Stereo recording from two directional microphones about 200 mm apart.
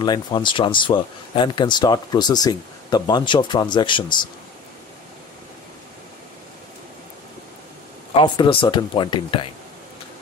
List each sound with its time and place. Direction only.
0.0 s speech: 20° left (ahead or behind)
8.1 s speech: 25° left (ahead or behind)